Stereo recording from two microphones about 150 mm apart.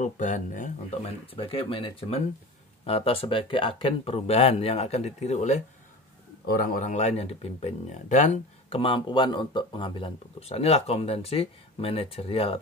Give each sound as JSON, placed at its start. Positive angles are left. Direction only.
{"t": 0.0, "sound": "speech", "side_deg": 55}
{"t": 6.4, "sound": "speech", "side_deg": 80}
{"t": 8.6, "sound": "speech", "side_deg": 35}